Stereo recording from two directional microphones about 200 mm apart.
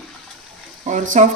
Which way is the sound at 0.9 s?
35° right (ahead or behind).